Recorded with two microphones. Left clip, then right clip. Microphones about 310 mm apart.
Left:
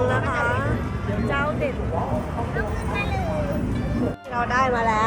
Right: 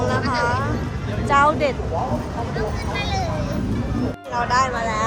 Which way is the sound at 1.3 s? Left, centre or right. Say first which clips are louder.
Right 9 dB; centre.